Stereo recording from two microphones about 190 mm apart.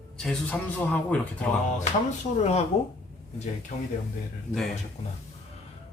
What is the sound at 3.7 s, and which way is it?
Speech, 45° left (ahead or behind).